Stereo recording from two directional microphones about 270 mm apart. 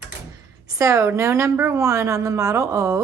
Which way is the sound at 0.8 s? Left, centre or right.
Centre.